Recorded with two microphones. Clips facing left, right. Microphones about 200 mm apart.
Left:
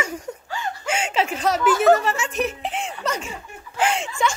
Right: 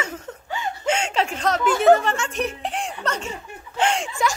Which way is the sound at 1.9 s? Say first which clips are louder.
Right 1 dB; 5° left (ahead or behind).